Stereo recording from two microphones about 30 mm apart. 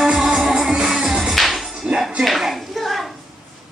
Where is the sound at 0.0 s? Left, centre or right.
Centre.